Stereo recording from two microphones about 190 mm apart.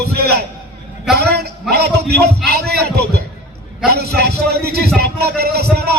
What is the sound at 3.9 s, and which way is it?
Speech, 55° right (ahead or behind).